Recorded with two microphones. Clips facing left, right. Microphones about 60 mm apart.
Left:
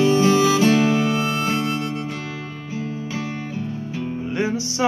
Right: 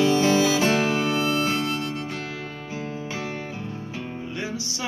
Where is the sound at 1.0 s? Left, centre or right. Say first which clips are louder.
Left 2 dB; left.